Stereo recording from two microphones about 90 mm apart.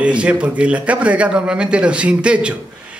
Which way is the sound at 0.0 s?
15° right (ahead or behind).